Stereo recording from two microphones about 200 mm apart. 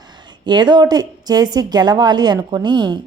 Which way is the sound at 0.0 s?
20° right (ahead or behind).